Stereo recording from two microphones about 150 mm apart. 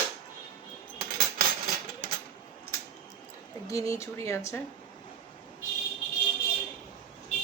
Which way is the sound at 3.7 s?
20° left (ahead or behind).